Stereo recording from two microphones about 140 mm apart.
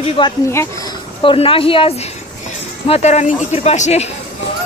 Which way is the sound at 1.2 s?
40° left (ahead or behind).